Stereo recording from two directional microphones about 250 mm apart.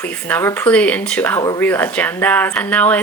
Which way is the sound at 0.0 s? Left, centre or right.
Centre.